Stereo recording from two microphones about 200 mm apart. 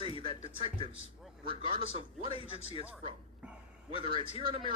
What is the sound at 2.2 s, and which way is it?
Speech, 30° left (ahead or behind).